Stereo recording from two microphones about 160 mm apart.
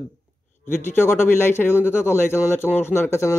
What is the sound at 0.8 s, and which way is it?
Speech, 15° left (ahead or behind).